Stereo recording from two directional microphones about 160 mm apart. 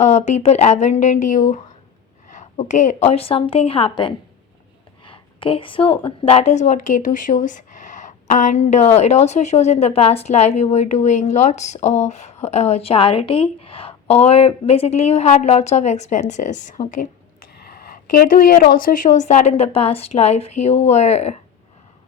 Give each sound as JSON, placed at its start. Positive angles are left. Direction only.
{"t": 0.0, "sound": "a woman's voice", "side_deg": 45}
{"t": 17.6, "sound": "a woman's voice", "side_deg": 70}